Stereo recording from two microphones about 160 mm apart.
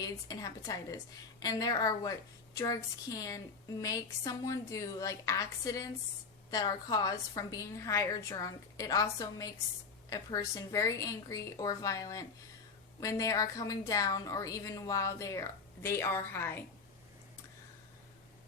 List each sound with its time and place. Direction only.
0.0 s a woman's voice: 25° left (ahead or behind)